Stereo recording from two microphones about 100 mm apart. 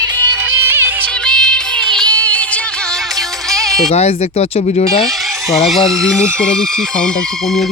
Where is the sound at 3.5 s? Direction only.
Centre (ahead or behind).